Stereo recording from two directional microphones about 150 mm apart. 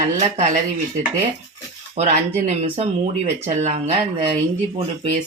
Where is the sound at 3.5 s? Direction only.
50° right (ahead or behind).